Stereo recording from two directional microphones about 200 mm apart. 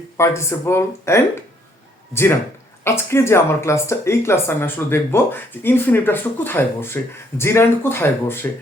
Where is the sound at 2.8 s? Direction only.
15° left (ahead or behind).